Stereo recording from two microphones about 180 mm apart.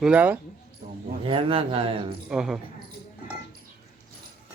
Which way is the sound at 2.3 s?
5° right (ahead or behind).